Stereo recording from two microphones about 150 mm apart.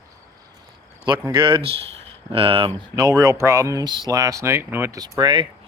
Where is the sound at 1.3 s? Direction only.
35° right (ahead or behind).